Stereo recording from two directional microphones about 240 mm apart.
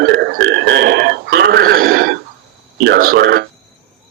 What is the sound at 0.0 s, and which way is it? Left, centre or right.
Burping, right.